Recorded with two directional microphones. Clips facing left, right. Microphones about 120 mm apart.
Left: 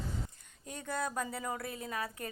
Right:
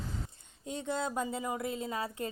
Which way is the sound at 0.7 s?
20° right (ahead or behind).